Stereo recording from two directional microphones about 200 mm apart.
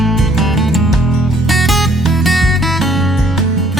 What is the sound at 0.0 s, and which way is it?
Music, centre (ahead or behind).